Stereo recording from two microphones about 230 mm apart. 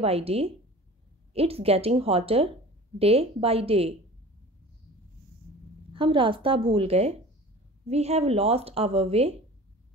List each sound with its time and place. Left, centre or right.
0.0 s a woman's voice: right
5.9 s a woman's voice: right